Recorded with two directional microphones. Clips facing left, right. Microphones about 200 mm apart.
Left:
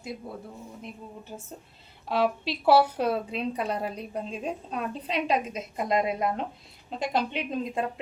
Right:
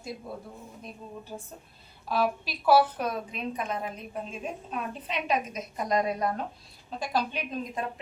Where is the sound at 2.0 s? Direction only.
25° left (ahead or behind).